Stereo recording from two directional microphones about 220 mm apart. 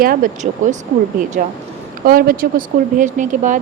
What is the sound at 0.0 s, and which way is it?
Speech, 40° right (ahead or behind).